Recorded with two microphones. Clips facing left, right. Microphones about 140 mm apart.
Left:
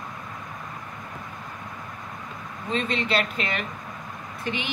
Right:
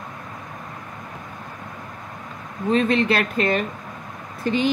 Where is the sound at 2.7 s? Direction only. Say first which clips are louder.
Right 6 dB; 50° right (ahead or behind).